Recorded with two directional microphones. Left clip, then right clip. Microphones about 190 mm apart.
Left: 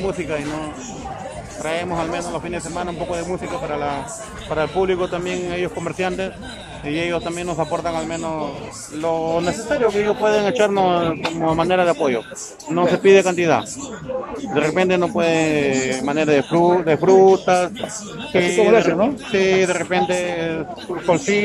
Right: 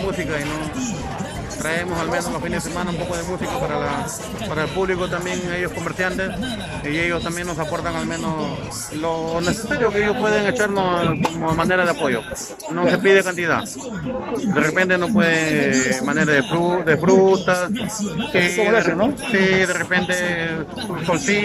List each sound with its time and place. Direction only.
1.6 s a man's voice: 10° left (ahead or behind)
4.6 s a man's voice: 10° left (ahead or behind)